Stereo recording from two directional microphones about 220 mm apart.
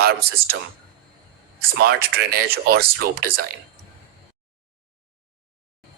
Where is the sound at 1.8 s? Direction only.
45° right (ahead or behind).